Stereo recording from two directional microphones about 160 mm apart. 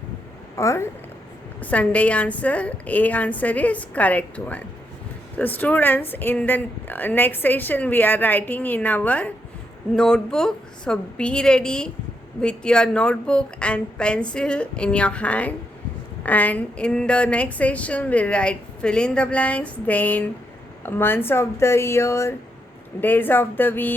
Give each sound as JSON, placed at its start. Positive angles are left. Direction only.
{"t": 0.5, "sound": "a woman's voice", "side_deg": 20}